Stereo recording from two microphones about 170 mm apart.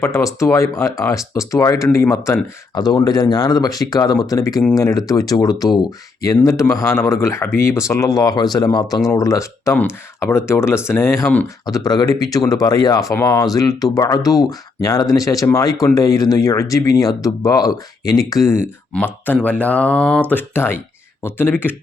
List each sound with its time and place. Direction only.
0.0 s speech: 20° left (ahead or behind)
18.6 s speech: 10° left (ahead or behind)